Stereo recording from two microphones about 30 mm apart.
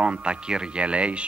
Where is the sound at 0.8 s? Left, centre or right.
Right.